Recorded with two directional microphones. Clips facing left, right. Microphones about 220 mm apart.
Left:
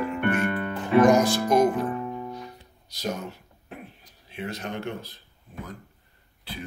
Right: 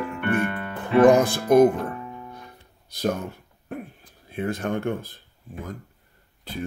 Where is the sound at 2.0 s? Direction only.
50° left (ahead or behind).